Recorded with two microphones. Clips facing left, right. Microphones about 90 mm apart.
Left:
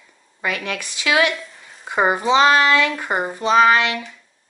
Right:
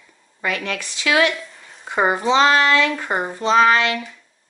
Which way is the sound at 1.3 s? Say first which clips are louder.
Left 1 dB; centre (ahead or behind).